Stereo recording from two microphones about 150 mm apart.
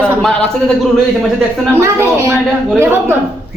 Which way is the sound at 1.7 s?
15° right (ahead or behind).